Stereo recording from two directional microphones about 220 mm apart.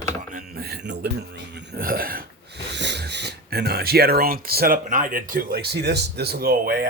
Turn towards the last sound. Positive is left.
turn(degrees=-40)  # may be behind; listen again after turning